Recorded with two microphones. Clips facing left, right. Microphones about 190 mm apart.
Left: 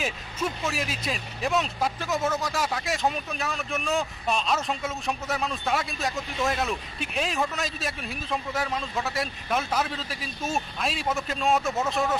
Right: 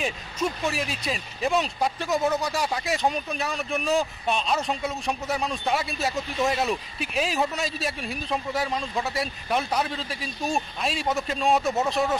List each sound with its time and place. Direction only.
0.0 s speech: centre (ahead or behind)
11.6 s speech: 15° right (ahead or behind)